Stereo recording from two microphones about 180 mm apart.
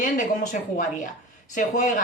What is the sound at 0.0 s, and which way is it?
A man's voice, 45° left (ahead or behind).